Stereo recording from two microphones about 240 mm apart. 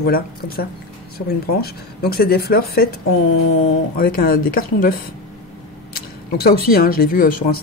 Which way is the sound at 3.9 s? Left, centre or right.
Left.